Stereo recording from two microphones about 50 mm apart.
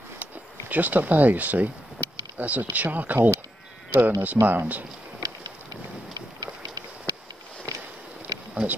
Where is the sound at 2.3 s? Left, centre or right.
Right.